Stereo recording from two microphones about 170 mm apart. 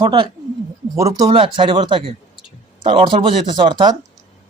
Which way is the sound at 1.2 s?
30° right (ahead or behind).